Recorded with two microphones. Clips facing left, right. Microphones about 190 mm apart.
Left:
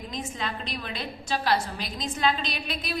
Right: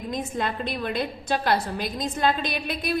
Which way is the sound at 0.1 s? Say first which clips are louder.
Right 6 dB; 55° right (ahead or behind).